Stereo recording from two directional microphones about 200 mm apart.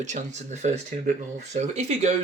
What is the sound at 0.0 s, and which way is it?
Speech, 35° right (ahead or behind).